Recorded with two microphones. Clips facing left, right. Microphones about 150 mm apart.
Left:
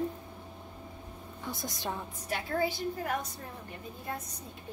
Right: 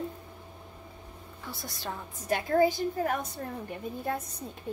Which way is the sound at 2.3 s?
45° right (ahead or behind).